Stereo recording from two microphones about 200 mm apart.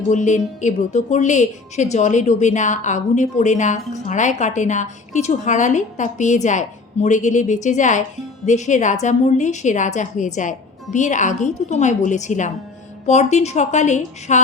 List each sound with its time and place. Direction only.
0.1 s a woman's voice: 35° left (ahead or behind)